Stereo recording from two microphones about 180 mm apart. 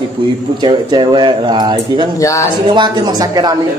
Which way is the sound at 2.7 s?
25° right (ahead or behind).